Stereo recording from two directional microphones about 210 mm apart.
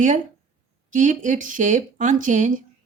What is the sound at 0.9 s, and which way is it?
Speech, 35° right (ahead or behind).